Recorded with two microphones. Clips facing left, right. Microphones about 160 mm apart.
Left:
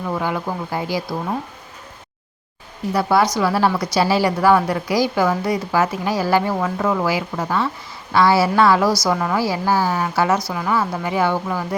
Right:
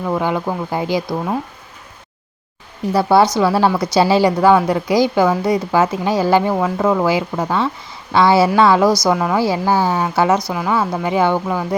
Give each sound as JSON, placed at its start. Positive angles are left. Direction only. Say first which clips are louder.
{"t": 0.1, "sound": "a woman's voice", "louder": "right 4 dB", "side_deg": -20}
{"t": 2.9, "sound": "a woman's voice", "louder": "right 4 dB", "side_deg": -30}